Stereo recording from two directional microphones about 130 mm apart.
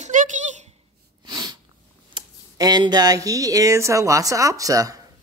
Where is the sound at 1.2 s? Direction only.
35° right (ahead or behind).